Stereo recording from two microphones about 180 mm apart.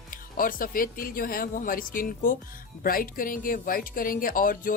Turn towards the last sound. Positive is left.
turn(degrees=50)  # may be behind; listen again after turning